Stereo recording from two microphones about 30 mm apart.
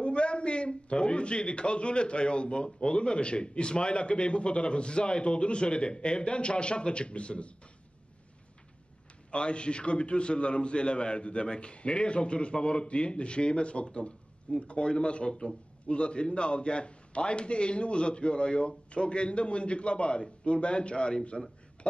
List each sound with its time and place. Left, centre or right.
0.0 s a man's voice: left
9.3 s a man's voice: left